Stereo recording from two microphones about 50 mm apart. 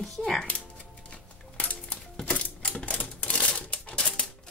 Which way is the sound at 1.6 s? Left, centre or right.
Left.